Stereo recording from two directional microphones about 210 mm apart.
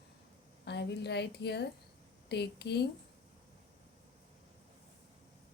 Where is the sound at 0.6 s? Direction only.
55° left (ahead or behind).